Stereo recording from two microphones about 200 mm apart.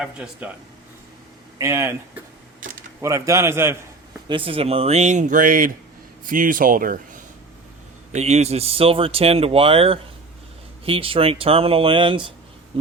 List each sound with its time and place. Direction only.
0.0 s a man's voice: 5° right (ahead or behind)
1.5 s a man's voice: 15° right (ahead or behind)
3.0 s a man's voice: 15° right (ahead or behind)
4.3 s speech: 25° right (ahead or behind); by 7.0 s 45° right (ahead or behind)
8.1 s speech: 35° right (ahead or behind)